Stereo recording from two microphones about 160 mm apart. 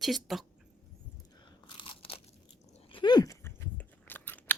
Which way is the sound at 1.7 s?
30° left (ahead or behind).